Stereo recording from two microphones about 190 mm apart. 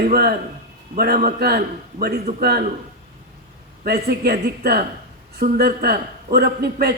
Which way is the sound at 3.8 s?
60° right (ahead or behind).